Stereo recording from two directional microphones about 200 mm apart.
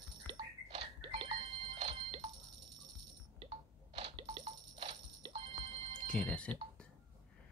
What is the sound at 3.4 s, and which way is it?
Telephone, 30° right (ahead or behind).